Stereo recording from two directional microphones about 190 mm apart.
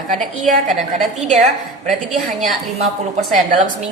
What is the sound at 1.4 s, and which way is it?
A woman's voice, centre (ahead or behind).